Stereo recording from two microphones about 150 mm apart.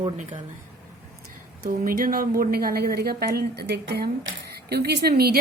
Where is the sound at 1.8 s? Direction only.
70° right (ahead or behind).